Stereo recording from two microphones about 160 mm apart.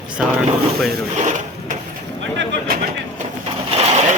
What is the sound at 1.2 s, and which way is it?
Wood, 50° right (ahead or behind).